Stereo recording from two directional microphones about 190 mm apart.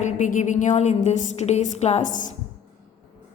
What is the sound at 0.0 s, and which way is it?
A woman's voice, 40° left (ahead or behind).